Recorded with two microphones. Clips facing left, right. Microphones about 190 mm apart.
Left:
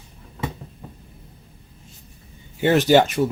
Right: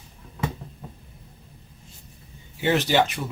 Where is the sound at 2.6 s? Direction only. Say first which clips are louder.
Left 6 dB; 45° left (ahead or behind).